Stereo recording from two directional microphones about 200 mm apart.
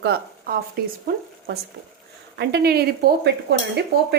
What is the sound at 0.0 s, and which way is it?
Speech, 50° right (ahead or behind).